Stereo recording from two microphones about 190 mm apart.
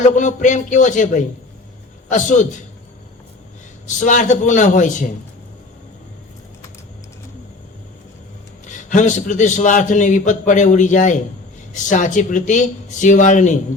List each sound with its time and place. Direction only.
0.0 s a man's voice: 40° left (ahead or behind)
3.8 s a man's voice: 40° left (ahead or behind)
8.6 s a man's voice: 40° left (ahead or behind)